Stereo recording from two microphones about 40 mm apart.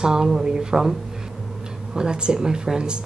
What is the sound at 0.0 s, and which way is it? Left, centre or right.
Speech, centre.